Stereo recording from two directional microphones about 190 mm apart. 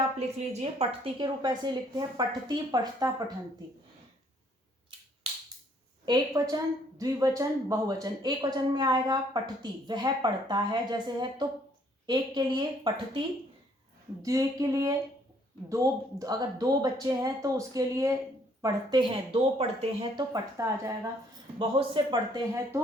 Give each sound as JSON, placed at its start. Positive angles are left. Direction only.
{"t": 0.2, "sound": "a woman's voice", "side_deg": -35}
{"t": 6.1, "sound": "a woman's voice", "side_deg": -20}
{"t": 20.3, "sound": "speech", "side_deg": -15}
{"t": 21.6, "sound": "a woman's voice", "side_deg": -25}